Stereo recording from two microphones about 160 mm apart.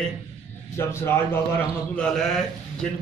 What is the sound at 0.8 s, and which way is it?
Speech, 15° left (ahead or behind).